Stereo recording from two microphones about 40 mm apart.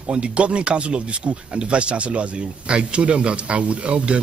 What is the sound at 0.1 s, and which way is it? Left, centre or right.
Speech, right.